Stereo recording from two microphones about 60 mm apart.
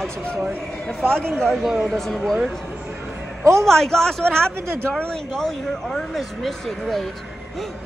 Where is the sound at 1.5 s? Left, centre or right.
Centre.